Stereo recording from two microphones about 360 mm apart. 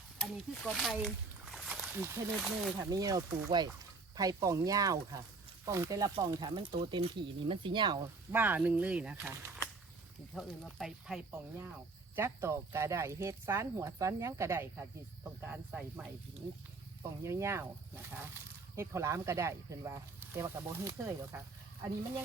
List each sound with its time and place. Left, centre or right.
0.2 s speech: centre
17.2 s speech: centre